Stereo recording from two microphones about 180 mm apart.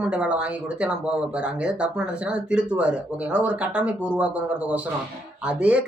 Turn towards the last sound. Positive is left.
turn(degrees=-5)  # may be behind; listen again after turning